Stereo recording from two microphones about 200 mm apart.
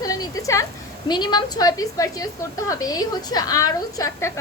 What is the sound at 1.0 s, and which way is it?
A woman's voice, 20° left (ahead or behind).